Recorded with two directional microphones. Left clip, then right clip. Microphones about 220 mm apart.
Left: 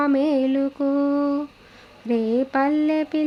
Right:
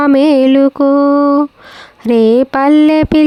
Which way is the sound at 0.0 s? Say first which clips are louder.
Right 12 dB; 55° right (ahead or behind).